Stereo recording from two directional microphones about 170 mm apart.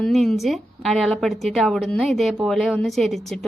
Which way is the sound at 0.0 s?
Centre (ahead or behind).